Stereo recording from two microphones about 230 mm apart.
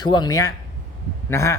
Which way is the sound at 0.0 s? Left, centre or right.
Centre.